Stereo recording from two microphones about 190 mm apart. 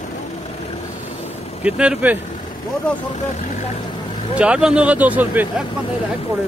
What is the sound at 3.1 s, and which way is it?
Speech, 35° left (ahead or behind).